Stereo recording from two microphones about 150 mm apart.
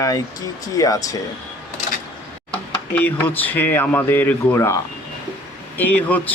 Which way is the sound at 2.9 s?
10° left (ahead or behind).